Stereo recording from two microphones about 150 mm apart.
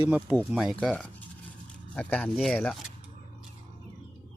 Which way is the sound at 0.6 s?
Centre (ahead or behind).